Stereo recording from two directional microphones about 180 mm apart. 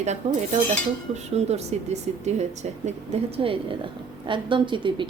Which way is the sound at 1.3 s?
40° right (ahead or behind).